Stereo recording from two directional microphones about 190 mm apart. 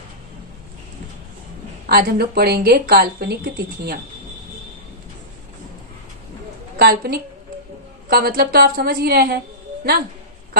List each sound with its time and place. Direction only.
1.9 s a woman's voice: 55° right (ahead or behind)
6.8 s a woman's voice: 50° right (ahead or behind)